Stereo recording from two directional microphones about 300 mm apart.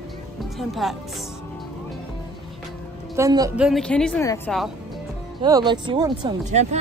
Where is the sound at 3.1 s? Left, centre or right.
Centre.